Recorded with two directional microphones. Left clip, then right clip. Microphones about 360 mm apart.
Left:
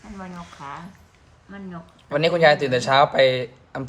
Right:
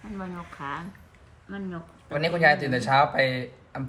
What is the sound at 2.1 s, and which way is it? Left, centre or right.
Speech, centre.